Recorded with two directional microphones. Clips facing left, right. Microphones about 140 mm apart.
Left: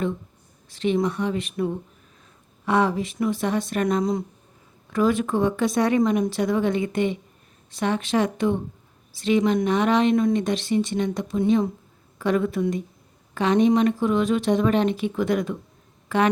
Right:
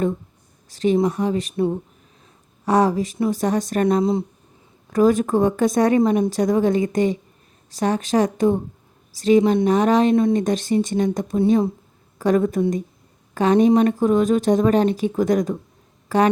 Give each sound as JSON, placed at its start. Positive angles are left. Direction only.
{"t": 0.7, "sound": "speech", "side_deg": -40}
{"t": 4.9, "sound": "speech", "side_deg": -40}